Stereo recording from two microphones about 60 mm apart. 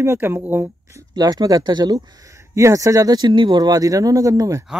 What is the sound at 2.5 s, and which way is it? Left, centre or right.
Speech, right.